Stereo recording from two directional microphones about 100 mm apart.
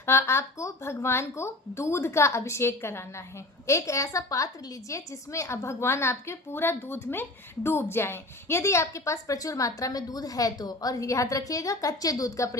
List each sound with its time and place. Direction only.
0.0 s a woman's voice: 25° left (ahead or behind)